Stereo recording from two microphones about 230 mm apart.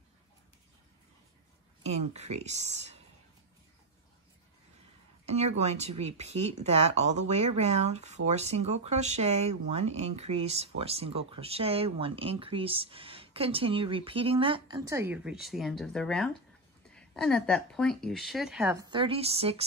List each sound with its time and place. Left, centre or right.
1.8 s speech: right
5.2 s speech: right